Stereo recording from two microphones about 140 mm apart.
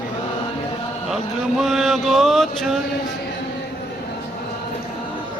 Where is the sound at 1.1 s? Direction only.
Centre (ahead or behind).